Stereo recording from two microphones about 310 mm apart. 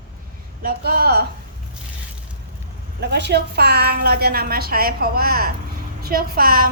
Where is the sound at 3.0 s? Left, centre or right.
Right.